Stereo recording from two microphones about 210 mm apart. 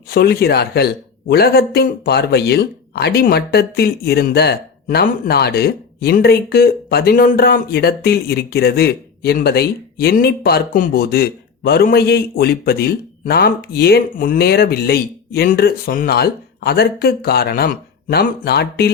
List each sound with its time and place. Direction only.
0.1 s speech: 45° left (ahead or behind)